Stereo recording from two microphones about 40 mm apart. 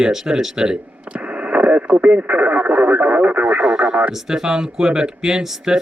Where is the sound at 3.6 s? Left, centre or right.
Right.